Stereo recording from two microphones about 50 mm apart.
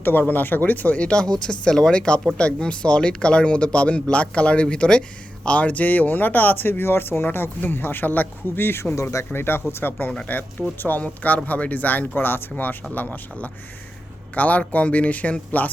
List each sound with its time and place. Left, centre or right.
0.0 s speech: left
0.9 s speech: centre; by 9.2 s left
9.3 s speech: left
10.1 s speech: left